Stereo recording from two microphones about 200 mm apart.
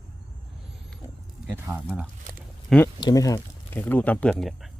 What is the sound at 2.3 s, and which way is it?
Speech, 40° right (ahead or behind).